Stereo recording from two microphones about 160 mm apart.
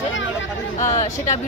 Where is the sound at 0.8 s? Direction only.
45° left (ahead or behind).